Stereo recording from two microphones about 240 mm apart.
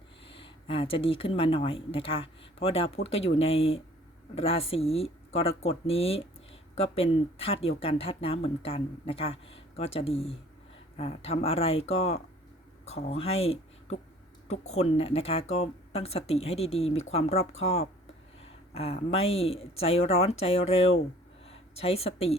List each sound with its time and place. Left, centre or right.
0.3 s speech: left